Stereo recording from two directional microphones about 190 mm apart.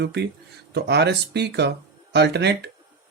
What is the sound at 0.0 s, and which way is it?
Speech, 60° right (ahead or behind).